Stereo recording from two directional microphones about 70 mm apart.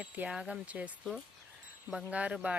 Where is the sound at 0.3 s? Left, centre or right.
Centre.